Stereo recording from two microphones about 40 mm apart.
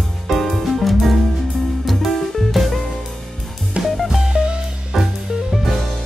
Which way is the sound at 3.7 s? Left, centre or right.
Right.